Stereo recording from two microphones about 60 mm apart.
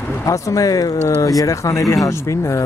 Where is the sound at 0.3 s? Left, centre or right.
Left.